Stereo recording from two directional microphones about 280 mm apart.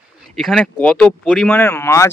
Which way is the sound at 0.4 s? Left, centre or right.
Centre.